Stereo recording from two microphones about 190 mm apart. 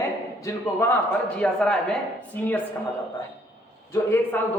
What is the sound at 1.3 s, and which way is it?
Speech, 5° left (ahead or behind).